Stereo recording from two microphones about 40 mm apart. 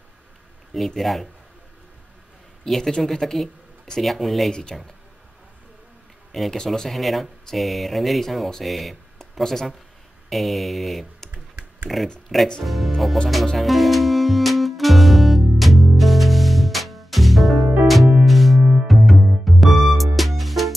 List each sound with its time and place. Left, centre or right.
0.7 s speech: centre
2.6 s speech: centre
4.0 s speech: centre
4.5 s speech: centre
6.5 s speech: centre
6.9 s speech: centre
9.4 s speech: centre
10.3 s speech: centre
13.6 s music: centre